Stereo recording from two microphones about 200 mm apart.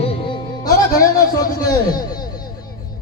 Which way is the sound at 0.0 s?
20° left (ahead or behind).